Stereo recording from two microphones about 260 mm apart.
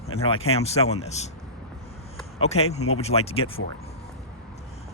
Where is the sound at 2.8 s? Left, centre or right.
Left.